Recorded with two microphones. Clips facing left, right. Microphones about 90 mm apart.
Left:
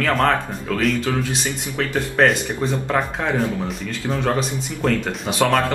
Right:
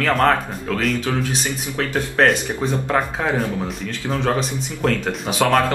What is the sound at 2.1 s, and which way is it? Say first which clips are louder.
Speech: even; centre (ahead or behind).